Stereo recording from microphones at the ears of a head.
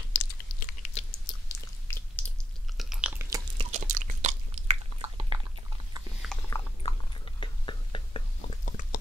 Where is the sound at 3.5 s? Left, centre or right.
Right.